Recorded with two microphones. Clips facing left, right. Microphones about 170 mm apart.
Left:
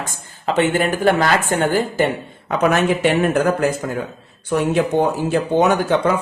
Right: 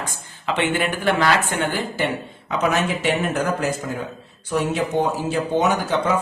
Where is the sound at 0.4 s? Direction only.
40° left (ahead or behind).